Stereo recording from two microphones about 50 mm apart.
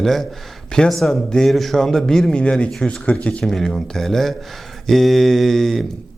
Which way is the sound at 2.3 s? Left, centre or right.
Left.